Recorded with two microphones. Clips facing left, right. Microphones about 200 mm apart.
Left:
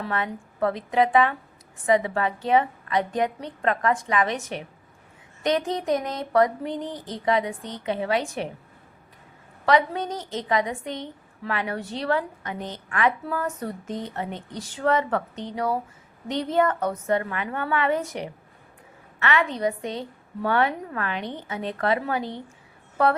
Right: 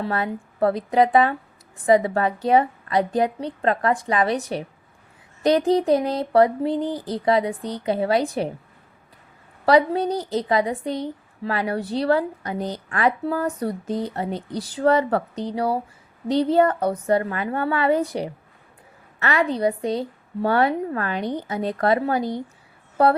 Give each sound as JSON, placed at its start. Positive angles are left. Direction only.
{"t": 0.0, "sound": "a woman's voice", "side_deg": -35}
{"t": 9.6, "sound": "a woman's voice", "side_deg": -35}